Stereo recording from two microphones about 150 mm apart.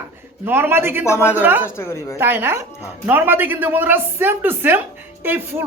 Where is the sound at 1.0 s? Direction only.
15° left (ahead or behind).